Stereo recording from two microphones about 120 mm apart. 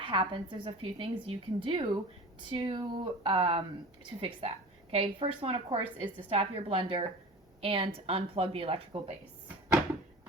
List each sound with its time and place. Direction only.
0.0 s a woman's voice: 45° right (ahead or behind)